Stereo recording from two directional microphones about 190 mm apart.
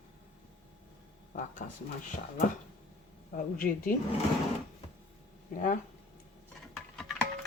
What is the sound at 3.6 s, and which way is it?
Speech, 50° left (ahead or behind).